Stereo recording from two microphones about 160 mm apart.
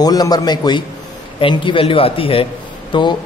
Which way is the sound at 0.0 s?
25° left (ahead or behind).